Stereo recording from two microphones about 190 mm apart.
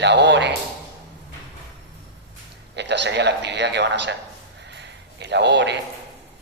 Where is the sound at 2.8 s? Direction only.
65° right (ahead or behind).